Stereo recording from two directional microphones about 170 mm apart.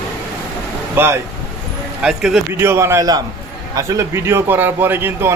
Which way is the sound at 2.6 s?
15° right (ahead or behind).